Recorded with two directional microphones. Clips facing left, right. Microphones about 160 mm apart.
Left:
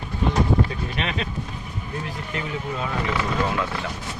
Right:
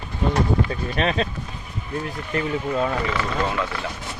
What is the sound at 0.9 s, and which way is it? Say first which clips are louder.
Speech: right 7 dB; 40° right (ahead or behind).